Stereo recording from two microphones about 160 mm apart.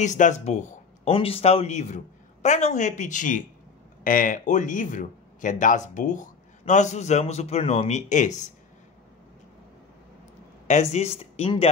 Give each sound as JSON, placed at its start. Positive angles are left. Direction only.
{"t": 0.0, "sound": "speech", "side_deg": 50}
{"t": 10.7, "sound": "speech", "side_deg": 45}